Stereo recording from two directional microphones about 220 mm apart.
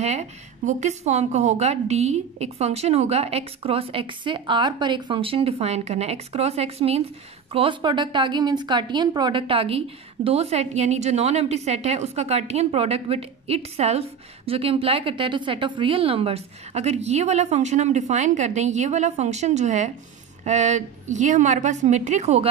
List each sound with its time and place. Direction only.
0.0 s a woman's voice: 30° right (ahead or behind)